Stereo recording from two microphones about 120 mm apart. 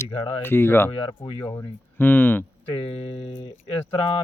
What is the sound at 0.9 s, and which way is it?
Speech, 45° left (ahead or behind).